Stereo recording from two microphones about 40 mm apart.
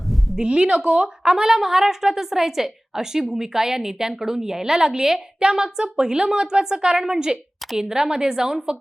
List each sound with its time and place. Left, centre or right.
0.3 s a woman's voice: right